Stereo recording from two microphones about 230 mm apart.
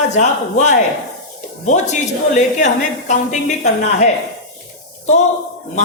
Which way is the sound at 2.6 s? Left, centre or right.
Left.